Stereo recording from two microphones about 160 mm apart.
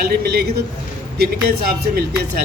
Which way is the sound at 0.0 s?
75° right (ahead or behind).